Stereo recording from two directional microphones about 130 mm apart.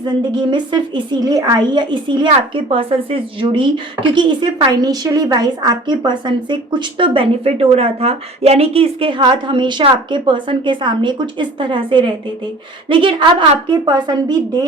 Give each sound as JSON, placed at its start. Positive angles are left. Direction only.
{"t": 0.0, "sound": "a woman's voice", "side_deg": -35}